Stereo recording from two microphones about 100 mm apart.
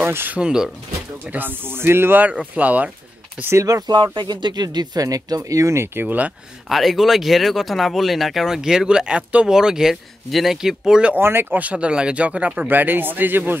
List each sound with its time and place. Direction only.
0.0 s speech: 20° right (ahead or behind)
0.4 s speech: 10° right (ahead or behind)
1.2 s speech: 20° right (ahead or behind)
3.5 s speech: 35° right (ahead or behind); by 6.3 s 15° right (ahead or behind)
6.7 s speech: centre (ahead or behind)
11.1 s speech: 20° right (ahead or behind)